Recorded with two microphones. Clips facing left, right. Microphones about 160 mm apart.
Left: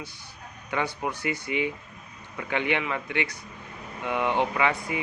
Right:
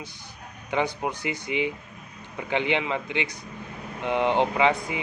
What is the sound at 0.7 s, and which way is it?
Speech, 20° right (ahead or behind).